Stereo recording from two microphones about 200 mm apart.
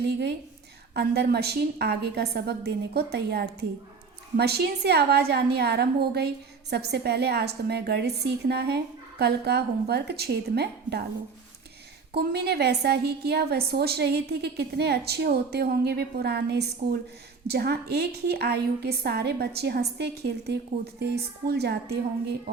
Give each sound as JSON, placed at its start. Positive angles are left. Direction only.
{"t": 0.1, "sound": "a woman's voice", "side_deg": -55}
{"t": 12.1, "sound": "a woman's voice", "side_deg": -50}